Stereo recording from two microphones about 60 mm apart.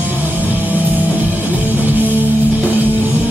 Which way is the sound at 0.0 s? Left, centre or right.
Right.